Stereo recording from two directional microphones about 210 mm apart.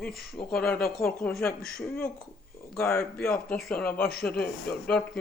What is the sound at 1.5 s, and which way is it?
Speech, 45° left (ahead or behind).